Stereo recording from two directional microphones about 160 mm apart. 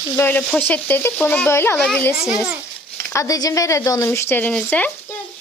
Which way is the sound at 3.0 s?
20° left (ahead or behind).